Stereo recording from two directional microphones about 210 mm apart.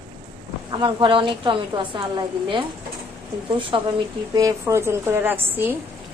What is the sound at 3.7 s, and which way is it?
A woman's voice, 25° right (ahead or behind).